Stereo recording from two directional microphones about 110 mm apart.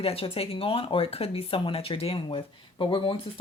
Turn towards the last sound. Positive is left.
turn(degrees=50)  # may be behind; listen again after turning